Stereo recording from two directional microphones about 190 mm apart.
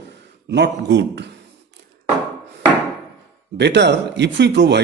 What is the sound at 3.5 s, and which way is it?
Speech, 65° right (ahead or behind).